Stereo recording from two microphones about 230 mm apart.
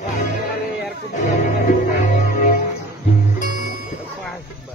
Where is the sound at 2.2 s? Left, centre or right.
Left.